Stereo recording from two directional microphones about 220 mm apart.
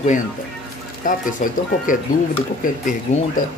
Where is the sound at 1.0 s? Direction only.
35° left (ahead or behind).